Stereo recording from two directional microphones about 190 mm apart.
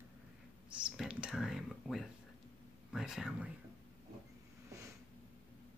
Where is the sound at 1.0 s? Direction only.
5° right (ahead or behind).